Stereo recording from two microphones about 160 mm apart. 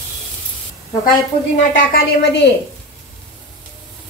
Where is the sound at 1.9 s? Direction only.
90° left.